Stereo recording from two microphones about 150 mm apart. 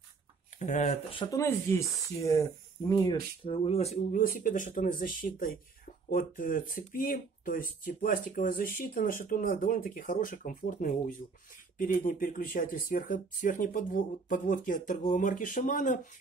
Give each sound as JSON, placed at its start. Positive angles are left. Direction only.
{"t": 0.6, "sound": "speech", "side_deg": 50}
{"t": 1.3, "sound": "speech", "side_deg": 20}
{"t": 2.9, "sound": "speech", "side_deg": 35}
{"t": 4.1, "sound": "speech", "side_deg": 65}